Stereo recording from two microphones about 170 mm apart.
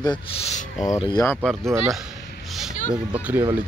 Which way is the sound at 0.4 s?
40° left (ahead or behind).